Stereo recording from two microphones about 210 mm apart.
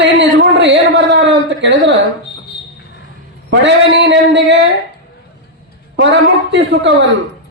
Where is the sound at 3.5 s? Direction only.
60° right (ahead or behind).